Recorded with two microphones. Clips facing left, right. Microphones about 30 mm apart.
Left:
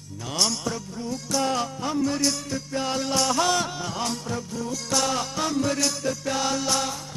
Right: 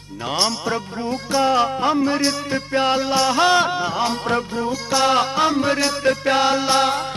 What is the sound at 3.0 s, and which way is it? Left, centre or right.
Music, right.